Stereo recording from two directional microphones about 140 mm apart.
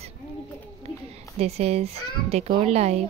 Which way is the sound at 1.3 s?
50° right (ahead or behind).